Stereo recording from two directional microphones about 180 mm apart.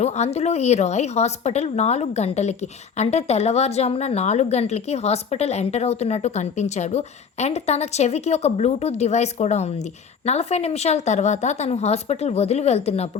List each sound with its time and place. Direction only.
0.0 s speech: 35° left (ahead or behind)